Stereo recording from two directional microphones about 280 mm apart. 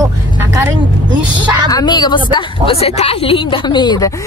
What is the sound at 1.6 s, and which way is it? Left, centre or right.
A woman's voice, centre.